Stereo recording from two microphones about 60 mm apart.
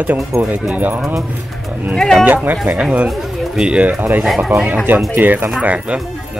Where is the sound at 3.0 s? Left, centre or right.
Centre.